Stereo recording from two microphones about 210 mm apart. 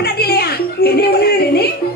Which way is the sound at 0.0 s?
50° left (ahead or behind).